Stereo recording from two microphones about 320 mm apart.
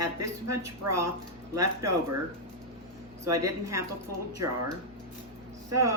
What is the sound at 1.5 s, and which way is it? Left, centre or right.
Speech, centre.